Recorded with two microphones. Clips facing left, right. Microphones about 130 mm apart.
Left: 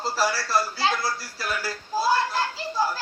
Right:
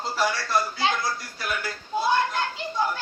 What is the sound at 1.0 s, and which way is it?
Speech, 30° left (ahead or behind).